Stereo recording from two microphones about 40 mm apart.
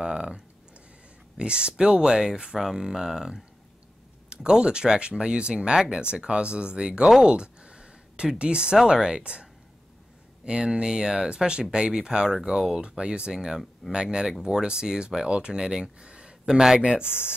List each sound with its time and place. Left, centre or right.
0.0 s speech: centre
1.4 s speech: right
7.2 s a sound: right
8.4 s speech: right